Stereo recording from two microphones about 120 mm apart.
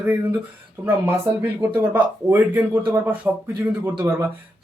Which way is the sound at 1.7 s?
15° right (ahead or behind).